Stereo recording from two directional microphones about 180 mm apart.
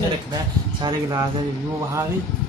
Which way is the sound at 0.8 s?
25° right (ahead or behind).